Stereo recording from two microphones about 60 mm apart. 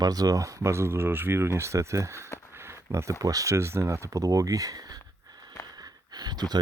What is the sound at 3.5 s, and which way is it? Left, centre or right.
Speech, right.